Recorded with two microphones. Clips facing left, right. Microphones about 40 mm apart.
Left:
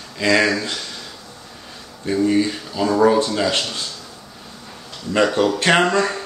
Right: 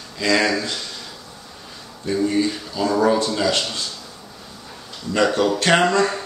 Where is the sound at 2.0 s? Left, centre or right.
Centre.